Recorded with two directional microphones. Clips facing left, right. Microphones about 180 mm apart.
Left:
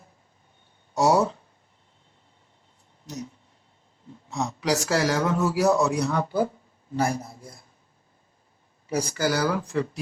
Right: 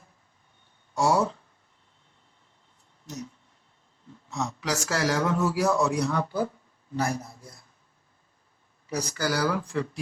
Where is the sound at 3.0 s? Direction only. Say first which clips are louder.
Left 2 dB; 15° left (ahead or behind).